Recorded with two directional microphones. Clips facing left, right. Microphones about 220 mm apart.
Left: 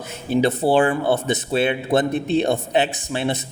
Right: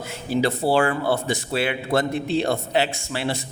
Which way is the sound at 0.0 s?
20° left (ahead or behind).